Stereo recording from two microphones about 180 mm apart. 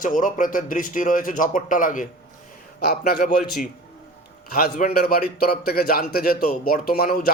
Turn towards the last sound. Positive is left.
turn(degrees=55)  # may be behind; listen again after turning